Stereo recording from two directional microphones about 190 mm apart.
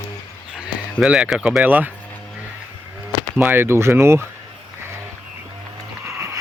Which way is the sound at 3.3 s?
10° right (ahead or behind).